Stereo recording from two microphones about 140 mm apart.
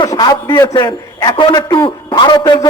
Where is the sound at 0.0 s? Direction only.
30° left (ahead or behind).